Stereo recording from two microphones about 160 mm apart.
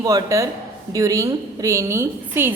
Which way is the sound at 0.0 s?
25° right (ahead or behind).